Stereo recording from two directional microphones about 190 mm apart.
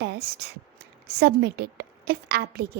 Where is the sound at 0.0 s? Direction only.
60° right (ahead or behind).